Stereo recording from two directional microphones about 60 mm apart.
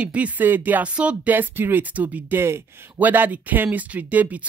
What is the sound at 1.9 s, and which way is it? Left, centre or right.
Speech, right.